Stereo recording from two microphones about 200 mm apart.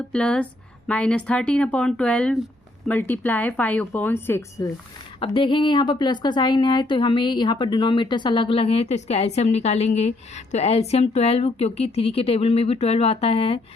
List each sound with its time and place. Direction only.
0.1 s a woman's voice: 5° left (ahead or behind)
5.2 s speech: 25° left (ahead or behind)